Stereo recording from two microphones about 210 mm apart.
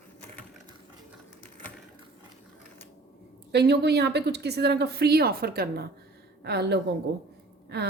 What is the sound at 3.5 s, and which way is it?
A woman's voice, 50° right (ahead or behind).